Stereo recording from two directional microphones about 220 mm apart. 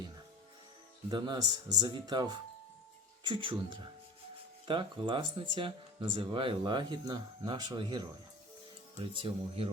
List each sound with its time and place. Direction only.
1.1 s speech: 20° right (ahead or behind)
9.1 s speech: 25° right (ahead or behind)